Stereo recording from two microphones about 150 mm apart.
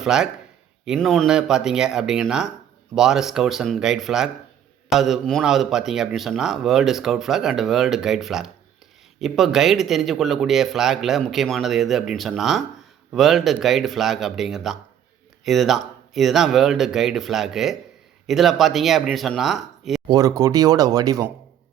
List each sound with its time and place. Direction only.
0.0 s a man's voice: 5° right (ahead or behind)
20.1 s speech: 25° right (ahead or behind)